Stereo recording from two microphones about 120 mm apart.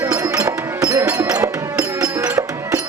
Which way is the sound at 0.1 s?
25° right (ahead or behind).